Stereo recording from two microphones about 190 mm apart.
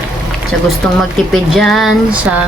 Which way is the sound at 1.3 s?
Centre (ahead or behind).